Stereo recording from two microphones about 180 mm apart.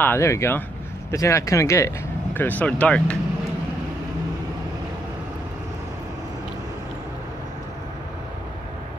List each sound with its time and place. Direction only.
0.0 s speech: 15° left (ahead or behind)